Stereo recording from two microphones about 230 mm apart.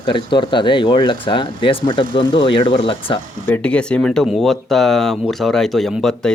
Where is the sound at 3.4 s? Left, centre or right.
Centre.